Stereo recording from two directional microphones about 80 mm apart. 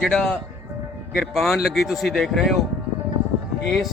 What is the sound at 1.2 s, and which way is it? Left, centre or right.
A man's voice, centre.